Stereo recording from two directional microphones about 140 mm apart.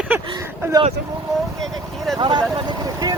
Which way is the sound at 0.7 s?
30° right (ahead or behind).